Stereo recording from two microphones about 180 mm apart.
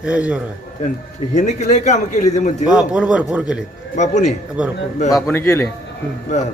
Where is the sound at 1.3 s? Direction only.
40° left (ahead or behind).